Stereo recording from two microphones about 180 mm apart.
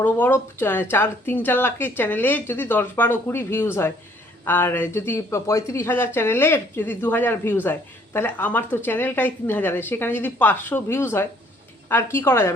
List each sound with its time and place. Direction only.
0.0 s speech: 10° left (ahead or behind)